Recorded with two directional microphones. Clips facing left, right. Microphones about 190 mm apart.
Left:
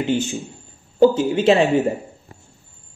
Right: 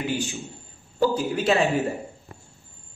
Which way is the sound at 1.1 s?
25° left (ahead or behind).